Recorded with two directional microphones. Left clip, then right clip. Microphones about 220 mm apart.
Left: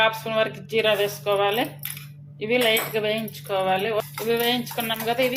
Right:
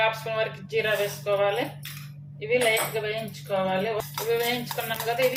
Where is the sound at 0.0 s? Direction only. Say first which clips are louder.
Left 4 dB; 30° left (ahead or behind).